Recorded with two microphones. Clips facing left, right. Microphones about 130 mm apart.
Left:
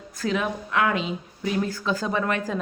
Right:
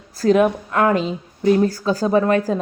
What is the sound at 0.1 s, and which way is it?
Speech, 35° right (ahead or behind).